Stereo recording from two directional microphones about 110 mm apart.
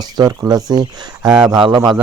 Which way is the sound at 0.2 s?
40° right (ahead or behind).